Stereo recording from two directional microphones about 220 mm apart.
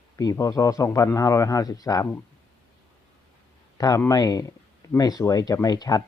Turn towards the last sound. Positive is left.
turn(degrees=15)  # may be behind; listen again after turning